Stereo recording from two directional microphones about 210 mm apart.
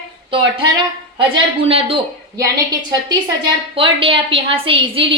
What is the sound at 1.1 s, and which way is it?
A woman's voice, 25° right (ahead or behind).